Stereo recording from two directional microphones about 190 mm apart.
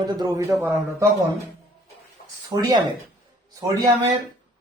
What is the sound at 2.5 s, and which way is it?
Speech, 20° right (ahead or behind).